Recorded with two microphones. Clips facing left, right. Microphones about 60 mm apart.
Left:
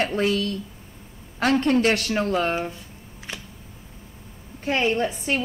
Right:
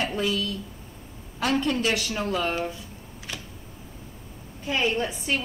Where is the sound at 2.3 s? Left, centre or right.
Left.